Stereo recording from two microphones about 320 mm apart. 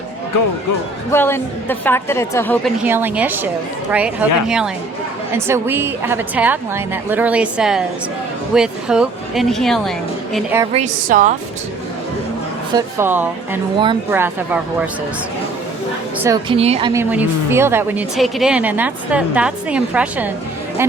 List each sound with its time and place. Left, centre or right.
1.1 s a woman's voice: centre
2.8 s speech: centre
10.7 s a woman's voice: right
12.7 s speech: centre
16.1 s speech: centre